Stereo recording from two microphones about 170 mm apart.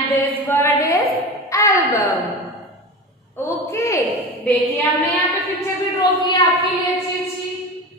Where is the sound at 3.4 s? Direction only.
15° left (ahead or behind).